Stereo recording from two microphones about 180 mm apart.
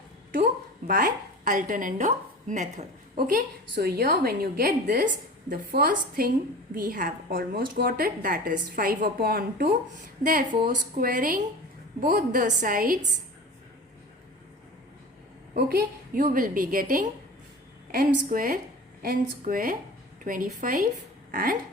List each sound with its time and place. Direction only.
0.9 s a woman's voice: 55° right (ahead or behind)
3.2 s a woman's voice: 55° right (ahead or behind)
15.5 s a woman's voice: 55° right (ahead or behind)